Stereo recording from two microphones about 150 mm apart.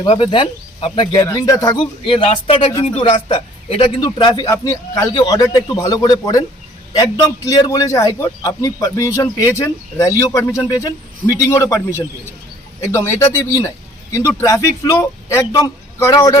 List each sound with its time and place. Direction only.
0.0 s speech: 35° left (ahead or behind)
4.5 s a man's voice: 20° left (ahead or behind)